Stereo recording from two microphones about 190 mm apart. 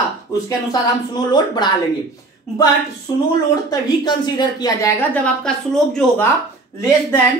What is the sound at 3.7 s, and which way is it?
A woman's voice, 20° left (ahead or behind).